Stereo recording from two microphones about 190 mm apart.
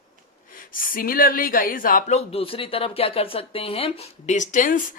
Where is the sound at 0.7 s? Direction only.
50° left (ahead or behind).